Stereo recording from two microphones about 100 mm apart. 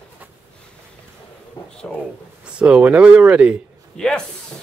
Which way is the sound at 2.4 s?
10° right (ahead or behind).